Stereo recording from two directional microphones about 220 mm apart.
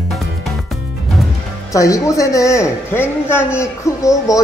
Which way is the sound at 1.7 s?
15° left (ahead or behind).